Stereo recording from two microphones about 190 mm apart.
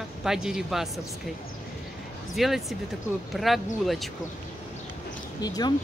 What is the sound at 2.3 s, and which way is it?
A woman's voice, centre (ahead or behind).